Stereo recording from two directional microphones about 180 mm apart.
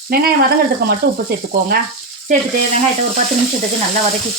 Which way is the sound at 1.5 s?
60° right (ahead or behind).